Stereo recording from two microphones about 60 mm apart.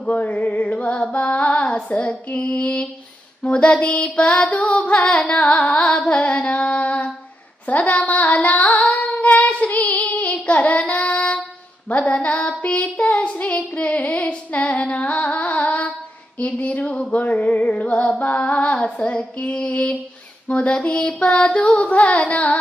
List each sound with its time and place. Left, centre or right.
0.0 s music: left
1.1 s female singing: left
1.6 s music: centre
8.9 s child singing: left
16.4 s music: left